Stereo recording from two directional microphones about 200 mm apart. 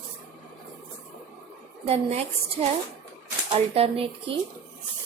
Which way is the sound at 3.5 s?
30° right (ahead or behind).